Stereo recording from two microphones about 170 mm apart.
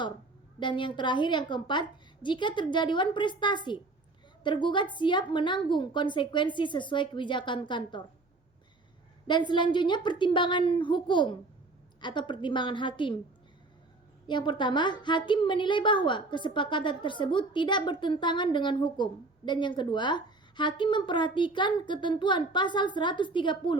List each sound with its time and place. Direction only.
0.6 s a woman's voice: 30° left (ahead or behind)
9.2 s a woman's voice: 25° left (ahead or behind)
14.3 s a woman's voice: 25° left (ahead or behind)